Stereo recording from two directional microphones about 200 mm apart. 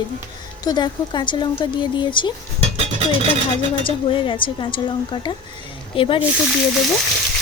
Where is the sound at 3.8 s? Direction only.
25° left (ahead or behind).